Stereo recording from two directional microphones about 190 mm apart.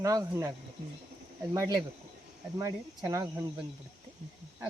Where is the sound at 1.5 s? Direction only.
15° right (ahead or behind).